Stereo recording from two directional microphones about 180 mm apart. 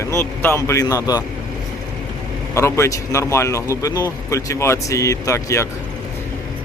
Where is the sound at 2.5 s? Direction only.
15° left (ahead or behind).